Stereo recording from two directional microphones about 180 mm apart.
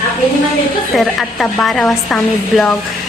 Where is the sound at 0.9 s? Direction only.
Centre (ahead or behind).